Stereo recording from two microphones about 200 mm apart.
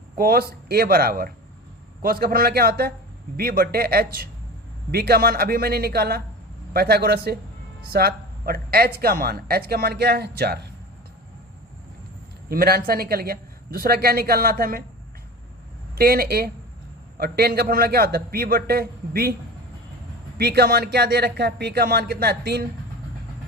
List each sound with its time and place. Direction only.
0.2 s speech: 50° right (ahead or behind)
12.5 s speech: 50° right (ahead or behind)
16.0 s speech: 50° right (ahead or behind)
20.4 s speech: 55° right (ahead or behind)